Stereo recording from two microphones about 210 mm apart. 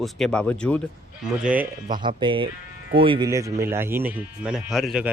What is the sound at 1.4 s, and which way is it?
Speech, 5° right (ahead or behind).